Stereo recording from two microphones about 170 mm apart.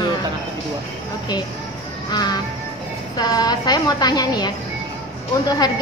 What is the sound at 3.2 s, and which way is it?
A woman's voice, 25° left (ahead or behind).